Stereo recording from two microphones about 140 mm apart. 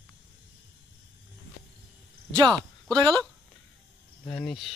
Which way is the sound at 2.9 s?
5° left (ahead or behind).